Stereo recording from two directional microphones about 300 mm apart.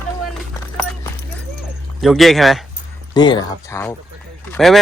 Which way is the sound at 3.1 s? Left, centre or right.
Centre.